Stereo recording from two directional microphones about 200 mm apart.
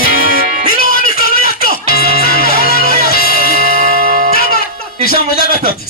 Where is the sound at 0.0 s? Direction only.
45° left (ahead or behind).